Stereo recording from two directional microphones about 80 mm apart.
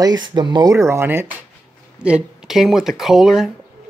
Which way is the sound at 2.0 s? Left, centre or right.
Centre.